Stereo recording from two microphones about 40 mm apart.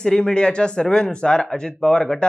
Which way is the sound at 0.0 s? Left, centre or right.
Centre.